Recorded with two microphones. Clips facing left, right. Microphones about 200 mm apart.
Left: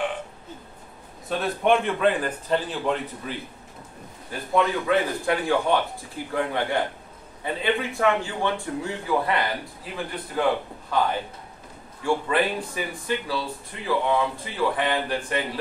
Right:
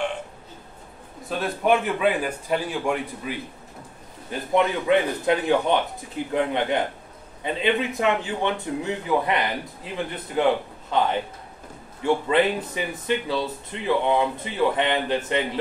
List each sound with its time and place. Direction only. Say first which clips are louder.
1.4 s a man's voice: even; centre (ahead or behind); by 15.4 s 20° right (ahead or behind)